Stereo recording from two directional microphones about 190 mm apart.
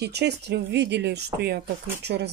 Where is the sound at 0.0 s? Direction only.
60° right (ahead or behind).